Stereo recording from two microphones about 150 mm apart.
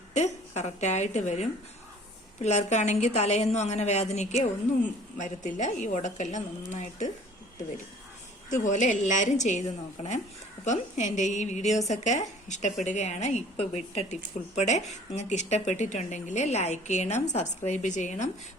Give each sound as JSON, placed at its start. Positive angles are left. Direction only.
{"t": 0.1, "sound": "speech", "side_deg": 50}
{"t": 8.4, "sound": "speech", "side_deg": 55}